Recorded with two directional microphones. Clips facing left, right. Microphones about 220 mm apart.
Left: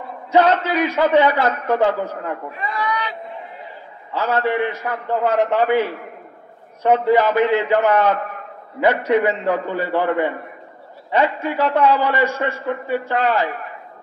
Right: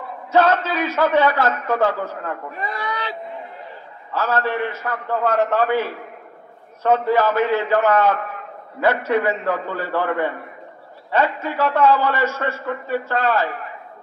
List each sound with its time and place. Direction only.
0.3 s a man's voice: 15° left (ahead or behind)
2.5 s a man's voice: 40° right (ahead or behind)
4.1 s a man's voice: 15° left (ahead or behind)